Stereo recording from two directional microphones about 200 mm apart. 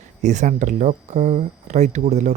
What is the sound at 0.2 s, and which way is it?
Speech, 35° right (ahead or behind).